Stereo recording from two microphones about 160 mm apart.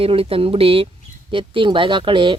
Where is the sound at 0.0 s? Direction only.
35° right (ahead or behind).